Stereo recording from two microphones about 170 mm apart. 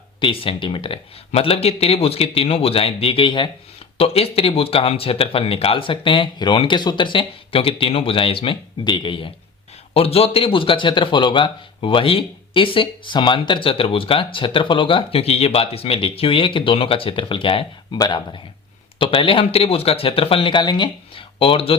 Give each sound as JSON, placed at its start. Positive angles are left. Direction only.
{"t": 0.2, "sound": "speech", "side_deg": 30}